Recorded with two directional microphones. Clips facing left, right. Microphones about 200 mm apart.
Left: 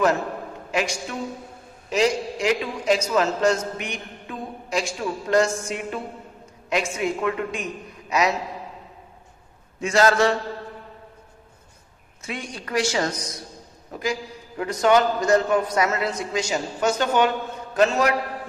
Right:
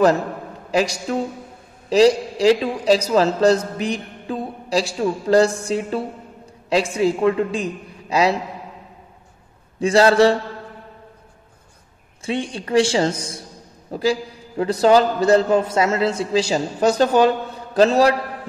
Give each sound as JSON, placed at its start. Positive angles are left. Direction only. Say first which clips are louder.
{"t": 0.7, "sound": "a man's voice", "louder": "right 6 dB", "side_deg": -35}
{"t": 9.8, "sound": "a man's voice", "louder": "right 5 dB", "side_deg": -30}
{"t": 12.2, "sound": "a man's voice", "louder": "right 9 dB", "side_deg": -30}